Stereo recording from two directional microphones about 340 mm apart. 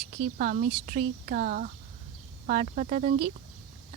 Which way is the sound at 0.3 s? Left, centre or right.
Right.